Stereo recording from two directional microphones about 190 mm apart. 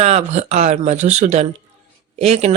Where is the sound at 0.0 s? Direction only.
35° right (ahead or behind).